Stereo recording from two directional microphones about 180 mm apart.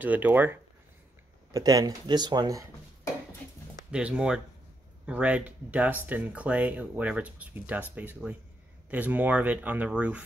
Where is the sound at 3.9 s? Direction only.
5° right (ahead or behind).